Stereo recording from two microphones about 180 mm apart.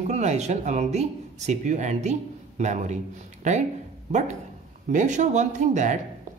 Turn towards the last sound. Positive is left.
turn(degrees=-40)  # may be behind; listen again after turning